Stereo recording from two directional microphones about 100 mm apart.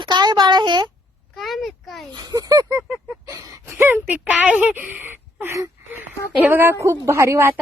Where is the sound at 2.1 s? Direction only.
40° right (ahead or behind).